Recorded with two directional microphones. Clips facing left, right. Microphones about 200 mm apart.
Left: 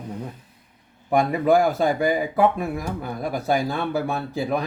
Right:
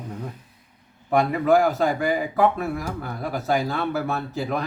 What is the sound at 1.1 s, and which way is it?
A man's voice, 15° left (ahead or behind).